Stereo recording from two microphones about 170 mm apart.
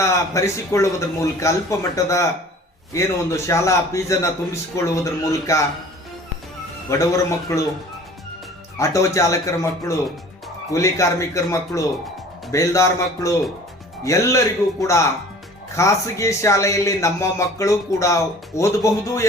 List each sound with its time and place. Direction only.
0.0 s a man's voice: 15° left (ahead or behind)
7.0 s a man's voice: 20° left (ahead or behind)
8.8 s a man's voice: 20° left (ahead or behind)